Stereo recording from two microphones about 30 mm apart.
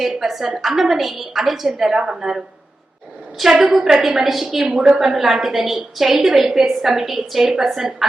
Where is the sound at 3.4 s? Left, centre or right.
Centre.